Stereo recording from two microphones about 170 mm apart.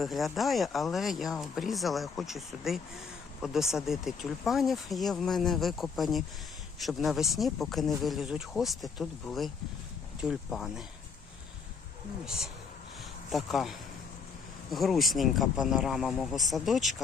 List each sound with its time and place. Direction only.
0.0 s speech: centre (ahead or behind)
12.2 s speech: 5° right (ahead or behind)